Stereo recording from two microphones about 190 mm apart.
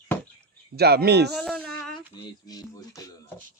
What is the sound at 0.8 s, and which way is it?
Speech, 55° right (ahead or behind).